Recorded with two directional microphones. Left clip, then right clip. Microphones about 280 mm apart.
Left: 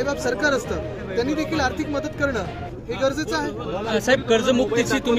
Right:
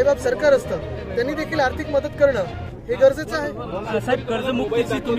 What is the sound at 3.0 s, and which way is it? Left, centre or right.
Speech, centre.